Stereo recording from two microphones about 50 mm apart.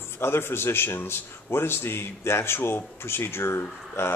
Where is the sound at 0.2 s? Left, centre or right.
Left.